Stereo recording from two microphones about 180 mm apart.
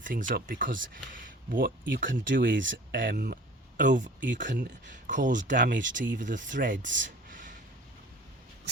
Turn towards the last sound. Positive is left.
turn(degrees=-45)  # may be behind; listen again after turning